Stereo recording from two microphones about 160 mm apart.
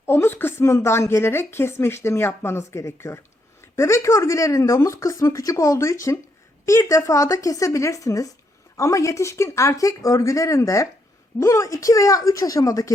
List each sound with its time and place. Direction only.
0.0 s speech: 15° left (ahead or behind)